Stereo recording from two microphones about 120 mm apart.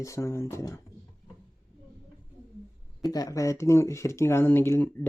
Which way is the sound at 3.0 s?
30° left (ahead or behind).